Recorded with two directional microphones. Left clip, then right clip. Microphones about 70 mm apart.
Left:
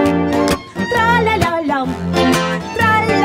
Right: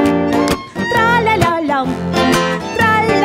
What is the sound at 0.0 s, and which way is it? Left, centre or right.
Music, right.